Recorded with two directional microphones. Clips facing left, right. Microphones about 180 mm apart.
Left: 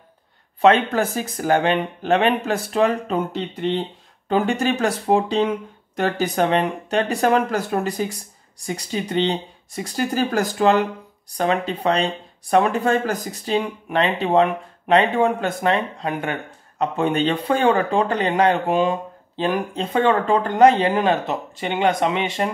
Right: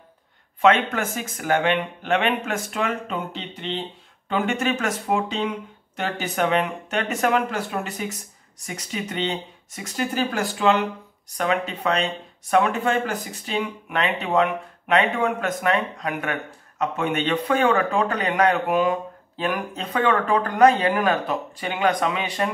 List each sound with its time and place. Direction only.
0.6 s speech: 35° left (ahead or behind)